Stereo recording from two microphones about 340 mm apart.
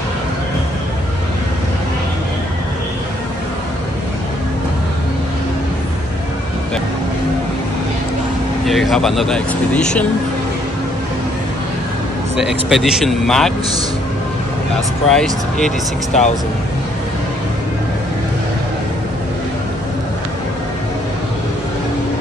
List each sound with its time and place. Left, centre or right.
8.6 s speech: centre
12.4 s speech: centre
15.0 s speech: centre
16.1 s speech: left